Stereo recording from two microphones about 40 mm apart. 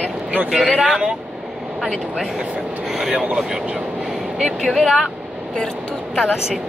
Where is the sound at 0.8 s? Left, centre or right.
Centre.